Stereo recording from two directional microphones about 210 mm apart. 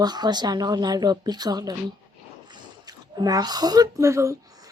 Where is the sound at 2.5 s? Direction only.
20° right (ahead or behind).